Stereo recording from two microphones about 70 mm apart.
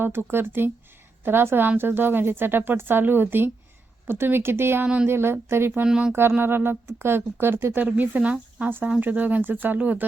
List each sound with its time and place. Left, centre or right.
0.0 s speech: right
5.8 s speech: centre
6.4 s speech: right